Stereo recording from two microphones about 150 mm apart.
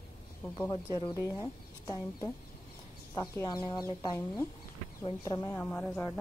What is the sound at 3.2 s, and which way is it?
Speech, 30° left (ahead or behind).